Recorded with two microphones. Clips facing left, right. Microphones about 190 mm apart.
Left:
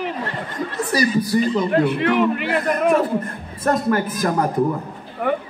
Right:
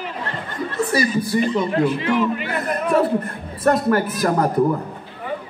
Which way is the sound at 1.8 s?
60° left (ahead or behind).